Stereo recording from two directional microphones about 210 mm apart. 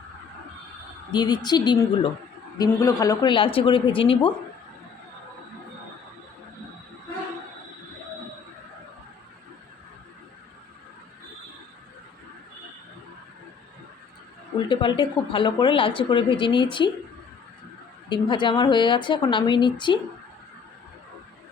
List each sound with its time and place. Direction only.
1.1 s speech: 20° left (ahead or behind)
14.7 s speech: 20° left (ahead or behind)
18.1 s speech: 20° left (ahead or behind)